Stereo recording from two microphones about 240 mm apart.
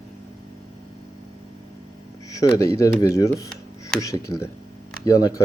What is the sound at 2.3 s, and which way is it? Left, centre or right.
Speech, centre.